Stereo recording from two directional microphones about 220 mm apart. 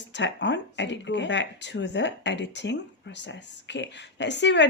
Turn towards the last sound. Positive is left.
turn(degrees=55)  # may be behind; listen again after turning